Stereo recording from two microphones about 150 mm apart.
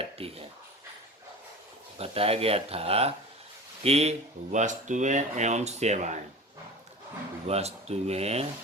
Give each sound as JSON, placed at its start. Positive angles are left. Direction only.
{"t": 0.0, "sound": "a sound", "side_deg": -40}
{"t": 2.0, "sound": "speech", "side_deg": -40}
{"t": 4.5, "sound": "speech", "side_deg": -55}
{"t": 7.4, "sound": "speech", "side_deg": -45}